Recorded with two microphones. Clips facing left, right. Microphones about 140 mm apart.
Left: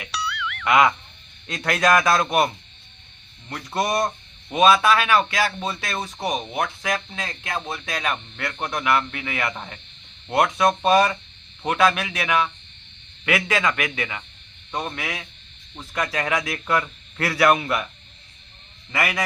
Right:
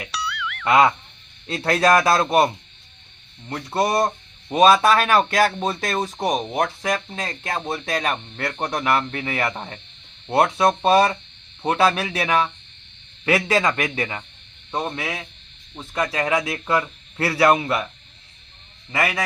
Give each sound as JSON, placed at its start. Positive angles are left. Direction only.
{"t": 0.1, "sound": "music", "side_deg": 0}
{"t": 0.6, "sound": "speech", "side_deg": -30}
{"t": 3.5, "sound": "a man's voice", "side_deg": -30}
{"t": 18.9, "sound": "a man's voice", "side_deg": -25}